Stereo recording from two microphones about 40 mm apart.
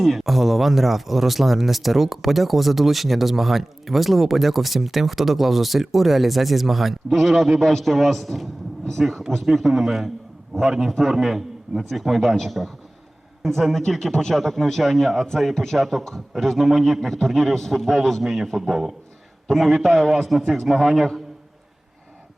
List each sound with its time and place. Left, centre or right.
0.0 s speech: centre
19.5 s speech: centre